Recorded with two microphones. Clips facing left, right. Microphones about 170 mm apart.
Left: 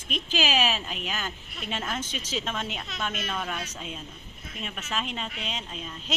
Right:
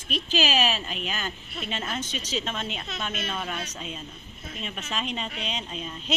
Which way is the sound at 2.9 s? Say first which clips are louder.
Left 1 dB; 25° right (ahead or behind).